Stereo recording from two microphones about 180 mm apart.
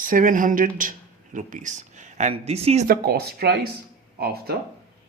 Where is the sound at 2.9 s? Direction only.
60° right (ahead or behind).